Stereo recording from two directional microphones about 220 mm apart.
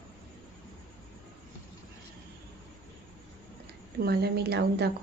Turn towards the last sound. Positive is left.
turn(degrees=-45)  # may be behind; listen again after turning